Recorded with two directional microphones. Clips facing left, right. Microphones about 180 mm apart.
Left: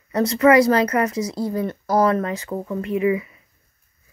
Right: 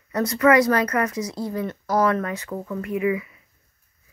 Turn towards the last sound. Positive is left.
turn(degrees=30)  # may be behind; listen again after turning